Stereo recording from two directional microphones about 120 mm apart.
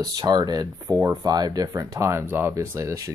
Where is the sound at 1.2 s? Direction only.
35° right (ahead or behind).